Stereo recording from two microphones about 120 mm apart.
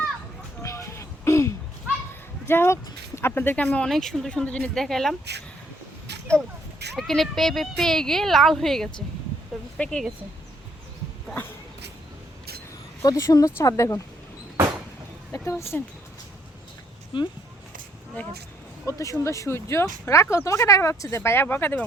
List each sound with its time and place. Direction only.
0.6 s a sound: 25° left (ahead or behind)
2.5 s speech: 20° left (ahead or behind); by 5.1 s 5° left (ahead or behind)
6.9 s speech: centre (ahead or behind)
13.0 s speech: 30° left (ahead or behind)
15.3 s speech: 25° left (ahead or behind)
17.1 s speech: 45° left (ahead or behind)
18.9 s speech: 25° left (ahead or behind)